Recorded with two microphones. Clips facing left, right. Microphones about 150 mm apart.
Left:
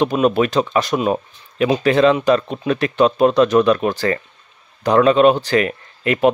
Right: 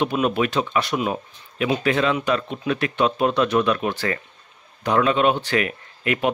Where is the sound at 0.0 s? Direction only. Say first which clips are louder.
Left 5 dB; 40° left (ahead or behind).